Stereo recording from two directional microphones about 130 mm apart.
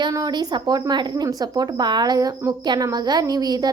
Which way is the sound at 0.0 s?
30° right (ahead or behind).